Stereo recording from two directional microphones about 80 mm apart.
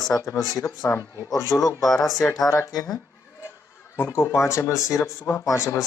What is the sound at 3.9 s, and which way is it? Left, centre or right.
Speech, left.